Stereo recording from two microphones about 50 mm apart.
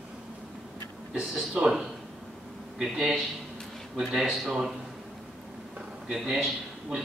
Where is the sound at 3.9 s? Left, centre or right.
Centre.